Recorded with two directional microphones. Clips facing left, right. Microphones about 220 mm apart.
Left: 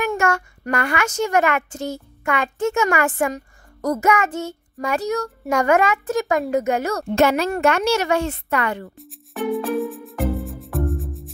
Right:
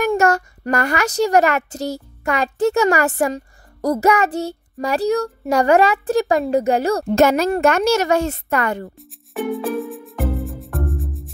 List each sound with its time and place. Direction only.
0.0 s a child's voice: 40° right (ahead or behind)
8.9 s music: centre (ahead or behind)